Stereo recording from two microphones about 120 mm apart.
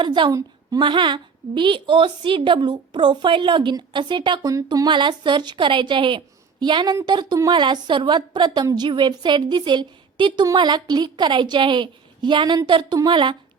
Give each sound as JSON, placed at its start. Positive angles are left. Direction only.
{"t": 0.0, "sound": "a woman's voice", "side_deg": -40}